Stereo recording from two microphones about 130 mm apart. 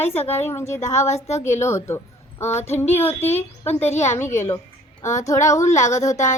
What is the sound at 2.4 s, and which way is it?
Speech, 60° left (ahead or behind).